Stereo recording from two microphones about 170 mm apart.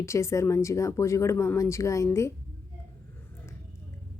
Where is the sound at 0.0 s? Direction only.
15° left (ahead or behind).